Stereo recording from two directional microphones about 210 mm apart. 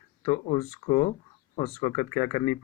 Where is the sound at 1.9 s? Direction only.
25° left (ahead or behind).